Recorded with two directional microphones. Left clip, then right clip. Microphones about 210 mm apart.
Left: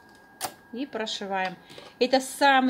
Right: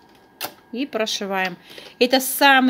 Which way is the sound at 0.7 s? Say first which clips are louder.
Right 9 dB; 50° right (ahead or behind).